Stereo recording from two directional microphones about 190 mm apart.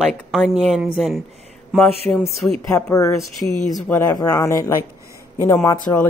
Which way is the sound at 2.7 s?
15° left (ahead or behind).